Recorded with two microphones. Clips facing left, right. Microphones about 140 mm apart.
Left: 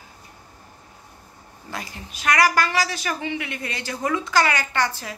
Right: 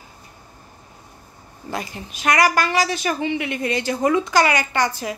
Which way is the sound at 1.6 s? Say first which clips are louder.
Right 6 dB; 20° right (ahead or behind).